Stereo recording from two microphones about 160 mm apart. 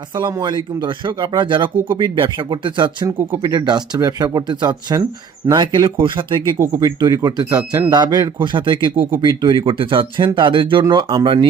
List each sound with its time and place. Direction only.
0.1 s speech: 25° right (ahead or behind)